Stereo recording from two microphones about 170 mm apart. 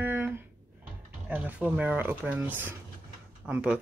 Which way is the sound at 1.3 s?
10° right (ahead or behind).